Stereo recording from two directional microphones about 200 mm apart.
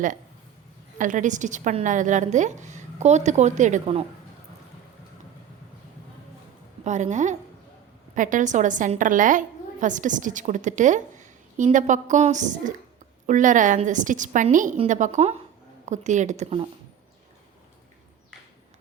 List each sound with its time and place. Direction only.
0.9 s a woman's voice: 40° right (ahead or behind)
6.8 s a woman's voice: 35° right (ahead or behind)